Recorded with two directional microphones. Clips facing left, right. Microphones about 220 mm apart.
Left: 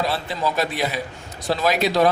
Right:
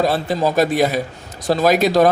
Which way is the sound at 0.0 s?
45° right (ahead or behind).